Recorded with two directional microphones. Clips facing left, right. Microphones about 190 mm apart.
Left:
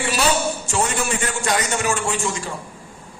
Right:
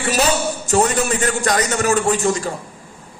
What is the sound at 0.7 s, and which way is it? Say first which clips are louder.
A man's voice: right 8 dB; 40° right (ahead or behind).